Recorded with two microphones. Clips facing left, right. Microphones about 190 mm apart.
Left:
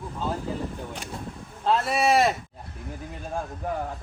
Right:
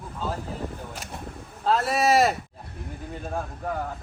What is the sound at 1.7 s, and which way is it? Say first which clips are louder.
Speech: even; centre (ahead or behind).